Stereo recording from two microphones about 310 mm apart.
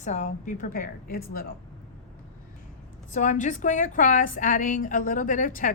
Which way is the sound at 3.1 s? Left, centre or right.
Left.